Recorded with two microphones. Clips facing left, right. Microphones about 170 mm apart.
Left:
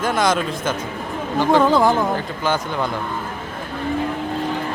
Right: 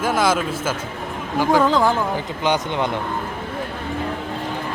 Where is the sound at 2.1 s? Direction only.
20° right (ahead or behind).